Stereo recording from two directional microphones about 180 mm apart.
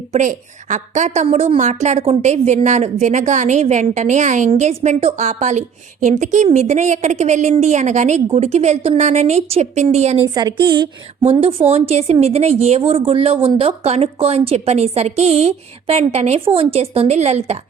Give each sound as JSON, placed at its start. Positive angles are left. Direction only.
{"t": 0.1, "sound": "a woman's voice", "side_deg": -45}
{"t": 10.3, "sound": "a woman's voice", "side_deg": -25}